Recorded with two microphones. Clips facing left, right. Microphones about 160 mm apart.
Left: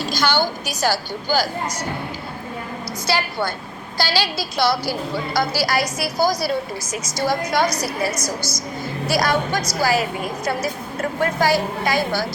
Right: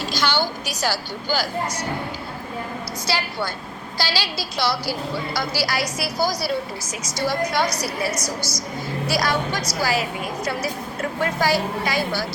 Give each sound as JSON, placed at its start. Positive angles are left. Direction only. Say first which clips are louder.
{"t": 0.1, "sound": "a woman's voice", "louder": "left 3 dB", "side_deg": 45}
{"t": 3.1, "sound": "a woman's voice", "louder": "left 4 dB", "side_deg": 50}
{"t": 11.2, "sound": "a woman's voice", "louder": "left 2 dB", "side_deg": 50}